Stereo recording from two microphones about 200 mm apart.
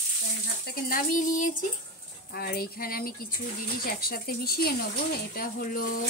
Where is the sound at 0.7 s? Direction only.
45° left (ahead or behind).